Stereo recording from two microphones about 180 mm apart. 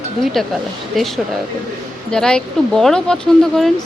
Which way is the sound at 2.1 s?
5° left (ahead or behind).